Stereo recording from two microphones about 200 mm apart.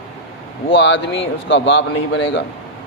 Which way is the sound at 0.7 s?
65° left (ahead or behind).